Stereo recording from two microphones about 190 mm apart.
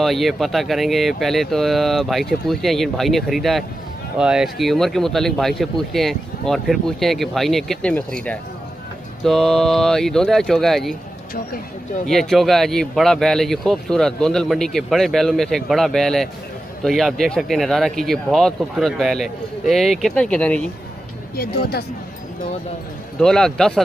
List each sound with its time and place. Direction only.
0.0 s speech: centre (ahead or behind)
12.1 s speech: centre (ahead or behind)
21.4 s speech: 55° left (ahead or behind)
23.2 s speech: 5° left (ahead or behind)